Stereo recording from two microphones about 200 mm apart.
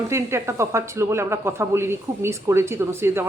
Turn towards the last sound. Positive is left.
turn(degrees=-10)  # may be behind; listen again after turning